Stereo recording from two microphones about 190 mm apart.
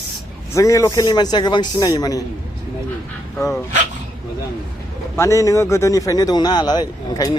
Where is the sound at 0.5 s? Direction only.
15° left (ahead or behind).